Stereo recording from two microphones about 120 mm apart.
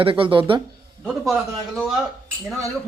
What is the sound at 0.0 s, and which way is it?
Speech, 45° right (ahead or behind).